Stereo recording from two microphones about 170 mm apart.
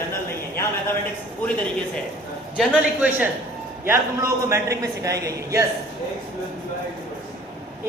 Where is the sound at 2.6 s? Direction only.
Centre (ahead or behind); by 5.6 s 20° right (ahead or behind).